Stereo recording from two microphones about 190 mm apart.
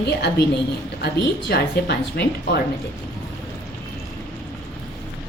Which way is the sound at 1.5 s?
60° left (ahead or behind).